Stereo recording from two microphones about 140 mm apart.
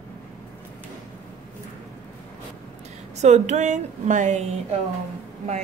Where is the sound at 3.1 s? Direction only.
55° right (ahead or behind).